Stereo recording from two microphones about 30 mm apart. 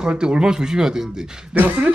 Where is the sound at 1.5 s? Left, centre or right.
Right.